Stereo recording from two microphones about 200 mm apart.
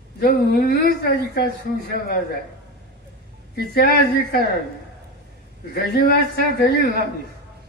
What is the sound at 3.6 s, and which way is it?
Speech, 50° left (ahead or behind).